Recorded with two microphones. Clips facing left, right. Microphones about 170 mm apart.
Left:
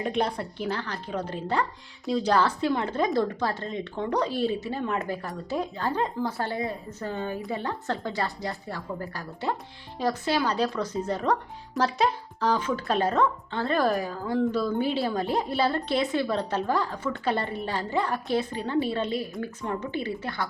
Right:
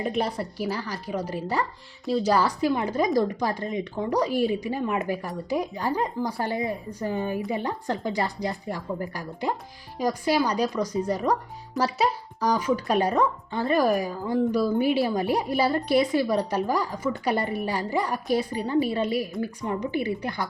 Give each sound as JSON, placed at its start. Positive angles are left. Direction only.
{"t": 0.0, "sound": "speech", "side_deg": -5}